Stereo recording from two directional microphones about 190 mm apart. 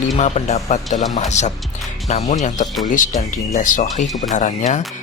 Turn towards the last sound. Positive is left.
turn(degrees=40)  # may be behind; listen again after turning